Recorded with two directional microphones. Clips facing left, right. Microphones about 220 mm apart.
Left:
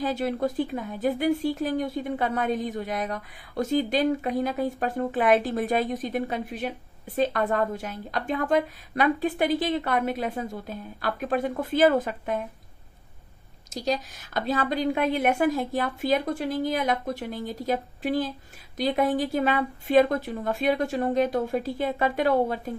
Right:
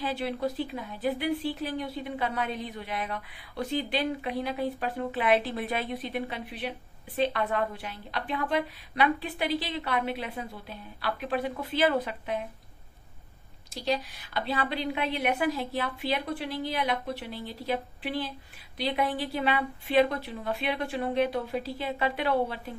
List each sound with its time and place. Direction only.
0.0 s a woman's voice: 45° left (ahead or behind)
13.7 s a woman's voice: 45° left (ahead or behind)